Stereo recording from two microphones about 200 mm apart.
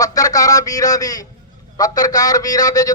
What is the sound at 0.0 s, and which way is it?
A man's voice, 20° left (ahead or behind).